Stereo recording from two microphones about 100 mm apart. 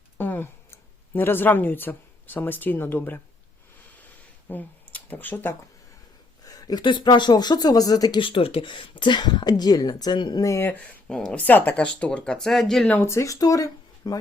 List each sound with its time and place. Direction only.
0.2 s speech: 20° left (ahead or behind)
4.4 s speech: 15° left (ahead or behind)
6.4 s a sound: 40° left (ahead or behind)
6.8 s speech: 50° left (ahead or behind)
8.2 s speech: 65° left (ahead or behind); by 10.4 s 45° left (ahead or behind)
10.4 s speech: 30° left (ahead or behind)
10.7 s speech: 15° left (ahead or behind)
13.0 s speech: 30° left (ahead or behind)